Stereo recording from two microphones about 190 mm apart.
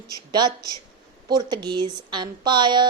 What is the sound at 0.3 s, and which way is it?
A woman's voice, 20° right (ahead or behind).